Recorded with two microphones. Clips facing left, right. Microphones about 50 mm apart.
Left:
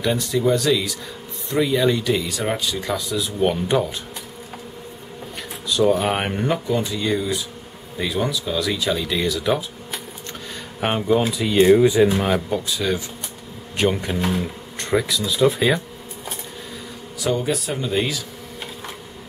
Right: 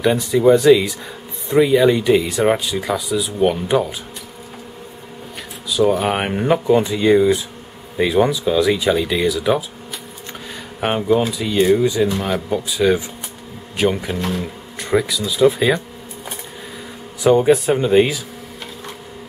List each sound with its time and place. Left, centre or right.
0.0 s speech: centre
5.7 s speech: centre
10.8 s speech: centre
12.4 s speech: centre
13.7 s speech: centre
14.1 s speech: centre
14.4 s speech: centre
17.2 s speech: right